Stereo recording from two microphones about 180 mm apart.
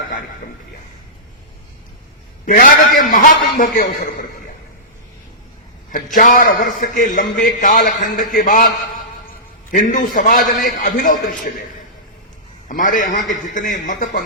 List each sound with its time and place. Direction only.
2.5 s a man's voice: 50° left (ahead or behind)
6.1 s a man's voice: 50° left (ahead or behind)
9.7 s a man's voice: 45° left (ahead or behind)
10.2 s a man's voice: 55° left (ahead or behind)
12.6 s a man's voice: 50° left (ahead or behind)